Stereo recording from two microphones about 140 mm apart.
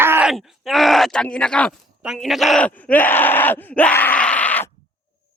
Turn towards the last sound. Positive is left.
turn(degrees=10)  # may be behind; listen again after turning